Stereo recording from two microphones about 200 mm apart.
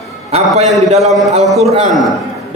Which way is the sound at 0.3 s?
30° right (ahead or behind).